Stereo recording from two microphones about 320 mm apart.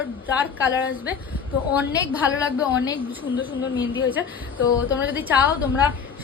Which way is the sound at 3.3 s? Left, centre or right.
Left.